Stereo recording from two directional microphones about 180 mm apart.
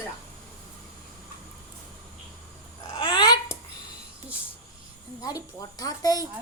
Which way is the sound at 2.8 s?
20° left (ahead or behind).